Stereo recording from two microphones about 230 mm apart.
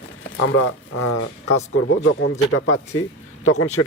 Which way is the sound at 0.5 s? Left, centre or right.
Left.